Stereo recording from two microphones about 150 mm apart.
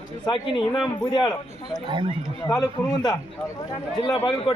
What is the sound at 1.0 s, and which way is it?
Speech, 30° left (ahead or behind).